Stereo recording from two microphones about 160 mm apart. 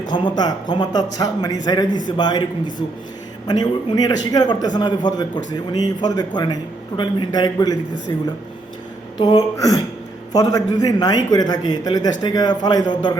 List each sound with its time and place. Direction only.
0.0 s a man's voice: 25° left (ahead or behind)
9.1 s a man's voice: 25° left (ahead or behind)